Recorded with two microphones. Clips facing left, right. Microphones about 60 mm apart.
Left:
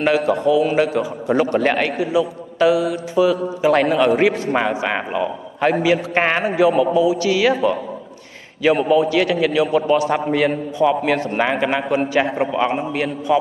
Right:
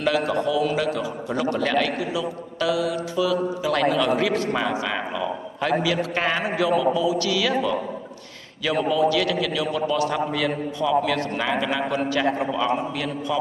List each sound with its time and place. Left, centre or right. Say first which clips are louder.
0.0 s a man's voice: left 5 dB; left
4.1 s a man's voice: left 5 dB; left
4.8 s a man's voice: left 5 dB; left
7.0 s a man's voice: left 6 dB; left
11.9 s a man's voice: left 4 dB; left